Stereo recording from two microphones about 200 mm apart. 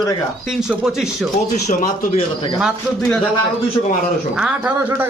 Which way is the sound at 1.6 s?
40° left (ahead or behind).